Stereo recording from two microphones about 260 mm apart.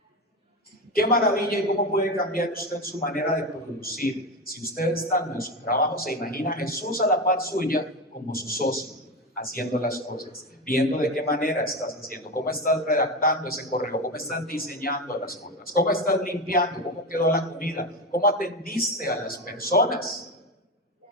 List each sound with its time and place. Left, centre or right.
0.9 s a man's voice: left